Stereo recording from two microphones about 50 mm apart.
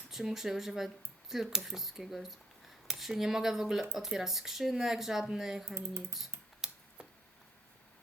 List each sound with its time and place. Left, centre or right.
0.1 s speech: centre
5.7 s typing: right
6.6 s a sound: centre